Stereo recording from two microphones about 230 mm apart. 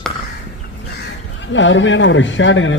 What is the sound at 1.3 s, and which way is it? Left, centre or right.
Speech, left.